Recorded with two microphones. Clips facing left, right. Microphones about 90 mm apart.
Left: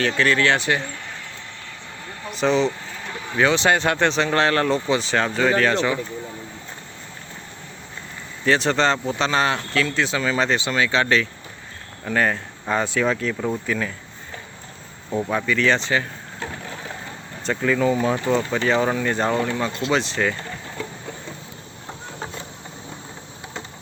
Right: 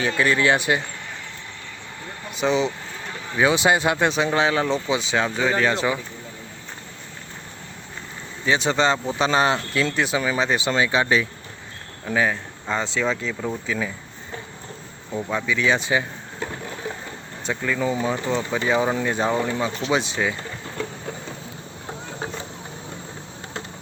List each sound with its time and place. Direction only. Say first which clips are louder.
0.2 s speech: right 1 dB; 15° right (ahead or behind)
2.3 s speech: left 2 dB; 5° right (ahead or behind)
8.4 s speech: left 1 dB; 5° right (ahead or behind)
10.7 s speech: even; 25° right (ahead or behind); by 12.4 s 5° right (ahead or behind)
12.6 s speech: left 3 dB; 5° left (ahead or behind)
15.4 s speech: even; 5° right (ahead or behind)
17.4 s speech: left 4 dB; centre (ahead or behind)